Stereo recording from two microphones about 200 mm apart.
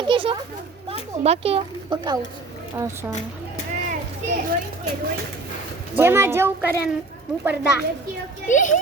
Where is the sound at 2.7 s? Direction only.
15° right (ahead or behind).